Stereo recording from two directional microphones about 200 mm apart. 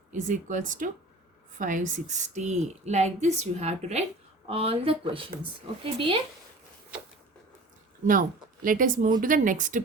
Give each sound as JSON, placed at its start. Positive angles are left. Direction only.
{"t": 0.1, "sound": "a woman's voice", "side_deg": -40}
{"t": 8.6, "sound": "a woman's voice", "side_deg": -45}